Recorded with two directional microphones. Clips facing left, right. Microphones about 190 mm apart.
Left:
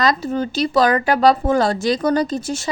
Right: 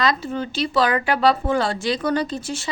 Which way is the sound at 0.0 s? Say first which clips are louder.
Left 3 dB; 40° left (ahead or behind).